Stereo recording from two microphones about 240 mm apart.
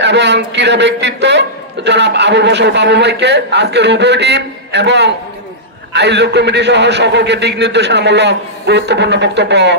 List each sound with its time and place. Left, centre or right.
0.0 s a man's voice: right